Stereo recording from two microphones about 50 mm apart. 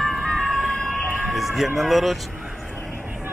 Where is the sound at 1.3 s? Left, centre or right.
Centre.